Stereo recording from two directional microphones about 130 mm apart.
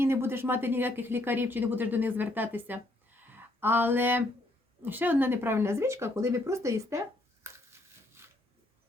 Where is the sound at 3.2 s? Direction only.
15° right (ahead or behind).